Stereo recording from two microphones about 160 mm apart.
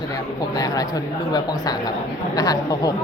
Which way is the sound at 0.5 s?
20° left (ahead or behind).